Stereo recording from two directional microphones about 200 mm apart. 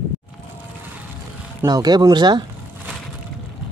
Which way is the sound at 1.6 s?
20° right (ahead or behind).